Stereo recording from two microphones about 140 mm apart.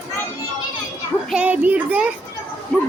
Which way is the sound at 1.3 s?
10° right (ahead or behind).